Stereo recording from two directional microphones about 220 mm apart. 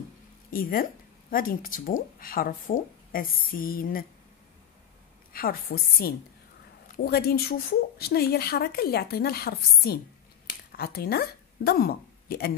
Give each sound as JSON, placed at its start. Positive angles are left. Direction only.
{"t": 0.5, "sound": "speech", "side_deg": 40}
{"t": 5.3, "sound": "a woman's voice", "side_deg": 40}